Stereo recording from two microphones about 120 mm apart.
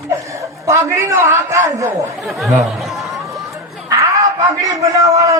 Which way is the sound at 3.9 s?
30° right (ahead or behind).